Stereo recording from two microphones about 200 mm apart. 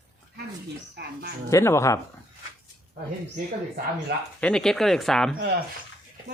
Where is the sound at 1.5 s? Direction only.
15° left (ahead or behind).